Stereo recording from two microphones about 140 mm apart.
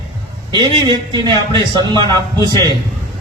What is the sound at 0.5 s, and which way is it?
A man's voice, 30° right (ahead or behind).